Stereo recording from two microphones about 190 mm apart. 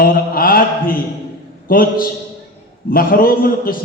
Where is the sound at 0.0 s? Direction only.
50° left (ahead or behind).